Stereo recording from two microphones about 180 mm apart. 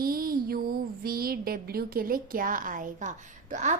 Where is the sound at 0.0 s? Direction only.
55° right (ahead or behind).